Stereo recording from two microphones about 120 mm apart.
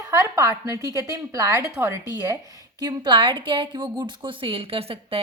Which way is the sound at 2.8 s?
35° right (ahead or behind).